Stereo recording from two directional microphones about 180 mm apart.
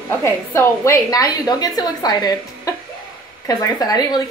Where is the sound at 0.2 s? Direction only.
15° left (ahead or behind).